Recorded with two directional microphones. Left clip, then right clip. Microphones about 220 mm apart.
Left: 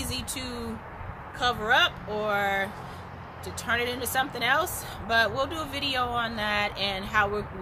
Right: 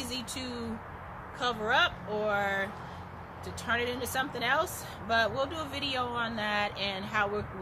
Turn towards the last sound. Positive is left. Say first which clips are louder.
# left 5 dB
turn(degrees=10)  # may be behind; listen again after turning